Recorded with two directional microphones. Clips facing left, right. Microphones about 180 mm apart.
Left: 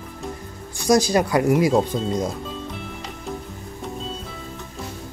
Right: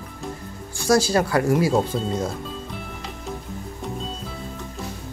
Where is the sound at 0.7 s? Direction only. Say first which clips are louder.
Left 1 dB; 15° left (ahead or behind).